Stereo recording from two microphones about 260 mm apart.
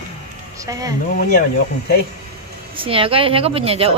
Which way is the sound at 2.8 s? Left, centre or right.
Right.